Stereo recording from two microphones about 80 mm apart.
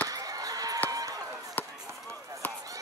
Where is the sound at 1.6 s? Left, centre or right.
Left.